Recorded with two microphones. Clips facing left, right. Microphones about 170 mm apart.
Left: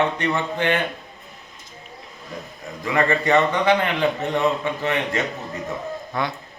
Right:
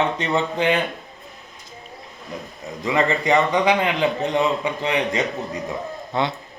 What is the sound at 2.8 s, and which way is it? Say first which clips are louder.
A man's voice: even; 20° right (ahead or behind).